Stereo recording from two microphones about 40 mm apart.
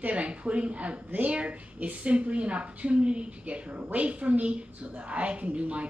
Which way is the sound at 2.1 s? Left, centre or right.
Right.